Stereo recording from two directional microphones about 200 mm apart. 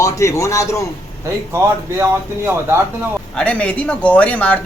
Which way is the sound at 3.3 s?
5° left (ahead or behind).